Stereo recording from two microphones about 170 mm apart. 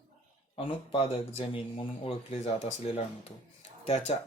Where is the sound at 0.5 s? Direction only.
30° left (ahead or behind).